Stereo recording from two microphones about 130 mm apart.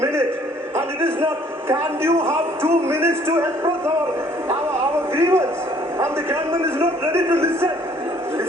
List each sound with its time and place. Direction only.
0.0 s music: 20° right (ahead or behind)
0.8 s a man's voice: 20° right (ahead or behind)
5.1 s a man's voice: 20° right (ahead or behind)